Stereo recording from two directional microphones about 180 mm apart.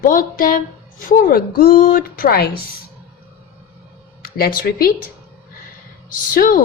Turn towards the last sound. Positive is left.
turn(degrees=50)  # may be behind; listen again after turning